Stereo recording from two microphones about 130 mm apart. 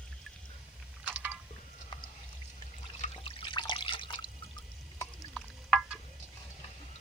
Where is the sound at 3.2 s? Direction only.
40° left (ahead or behind).